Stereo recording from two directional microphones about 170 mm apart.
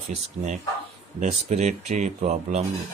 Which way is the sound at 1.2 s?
40° right (ahead or behind).